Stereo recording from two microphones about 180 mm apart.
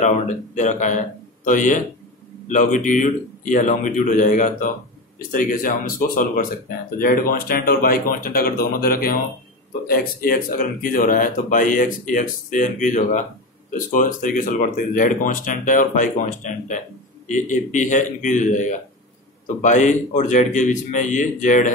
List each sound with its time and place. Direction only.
0.6 s a man's voice: 45° left (ahead or behind)